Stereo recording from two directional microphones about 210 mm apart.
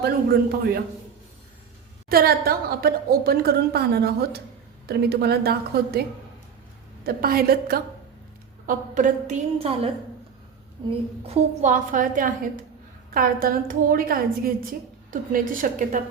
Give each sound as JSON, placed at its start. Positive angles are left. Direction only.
{"t": 0.0, "sound": "a woman's voice", "side_deg": -45}
{"t": 2.0, "sound": "a woman's voice", "side_deg": -45}
{"t": 7.0, "sound": "a woman's voice", "side_deg": -45}
{"t": 11.3, "sound": "a woman's voice", "side_deg": -35}